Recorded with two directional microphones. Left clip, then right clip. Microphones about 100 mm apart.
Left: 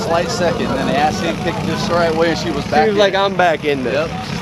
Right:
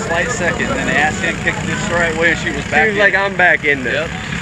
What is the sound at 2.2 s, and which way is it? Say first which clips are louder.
Speech: right 2 dB; 90° left.